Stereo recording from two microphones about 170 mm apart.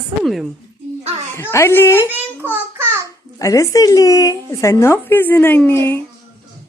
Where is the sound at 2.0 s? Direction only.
10° right (ahead or behind).